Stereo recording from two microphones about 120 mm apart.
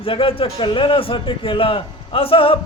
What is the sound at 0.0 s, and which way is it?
Speech, 50° left (ahead or behind).